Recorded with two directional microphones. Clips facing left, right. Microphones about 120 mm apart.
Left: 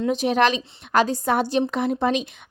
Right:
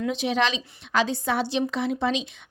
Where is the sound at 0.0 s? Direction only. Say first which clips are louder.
Left 5 dB; 45° left (ahead or behind).